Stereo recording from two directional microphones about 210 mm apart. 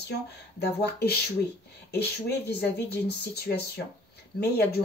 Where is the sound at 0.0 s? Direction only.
50° left (ahead or behind).